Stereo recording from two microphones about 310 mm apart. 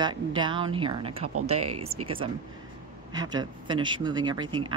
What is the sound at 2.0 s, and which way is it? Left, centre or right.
Speech, centre.